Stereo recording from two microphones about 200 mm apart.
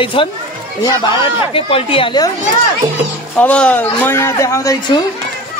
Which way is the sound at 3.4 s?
5° left (ahead or behind).